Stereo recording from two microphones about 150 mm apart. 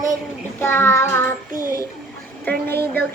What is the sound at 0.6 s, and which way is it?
Speech, 15° left (ahead or behind).